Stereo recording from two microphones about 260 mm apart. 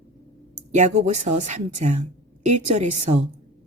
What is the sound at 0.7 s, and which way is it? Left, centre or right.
A woman's voice, right.